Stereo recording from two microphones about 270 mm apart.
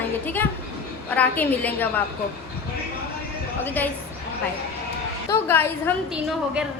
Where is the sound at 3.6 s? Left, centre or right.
Centre.